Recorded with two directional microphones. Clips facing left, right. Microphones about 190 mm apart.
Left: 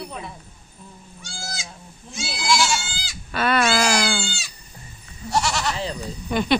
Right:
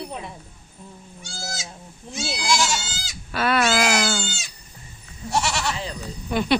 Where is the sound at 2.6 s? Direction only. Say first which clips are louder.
Left 1 dB; 20° right (ahead or behind).